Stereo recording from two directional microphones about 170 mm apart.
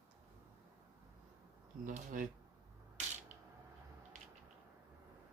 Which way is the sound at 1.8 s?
50° right (ahead or behind).